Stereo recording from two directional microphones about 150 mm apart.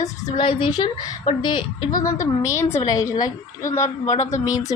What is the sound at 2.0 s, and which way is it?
A woman's voice, 20° left (ahead or behind).